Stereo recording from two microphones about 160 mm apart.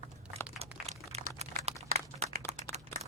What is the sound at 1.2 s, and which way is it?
Typing, 65° right (ahead or behind).